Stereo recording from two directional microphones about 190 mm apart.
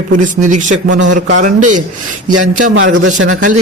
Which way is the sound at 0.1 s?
45° right (ahead or behind).